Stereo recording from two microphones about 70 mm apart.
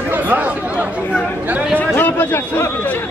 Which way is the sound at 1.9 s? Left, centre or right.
Left.